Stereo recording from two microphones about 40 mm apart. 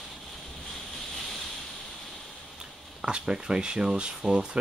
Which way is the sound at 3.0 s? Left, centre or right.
Right.